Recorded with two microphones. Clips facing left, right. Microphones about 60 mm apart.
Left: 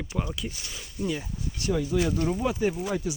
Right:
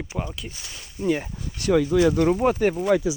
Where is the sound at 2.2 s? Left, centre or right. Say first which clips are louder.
Right 6 dB; right.